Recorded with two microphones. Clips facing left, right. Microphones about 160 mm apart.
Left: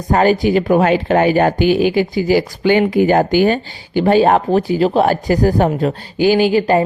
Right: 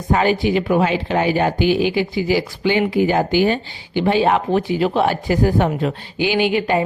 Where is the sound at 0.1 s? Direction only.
45° left (ahead or behind).